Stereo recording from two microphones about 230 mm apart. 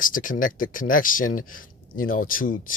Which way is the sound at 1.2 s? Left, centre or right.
Left.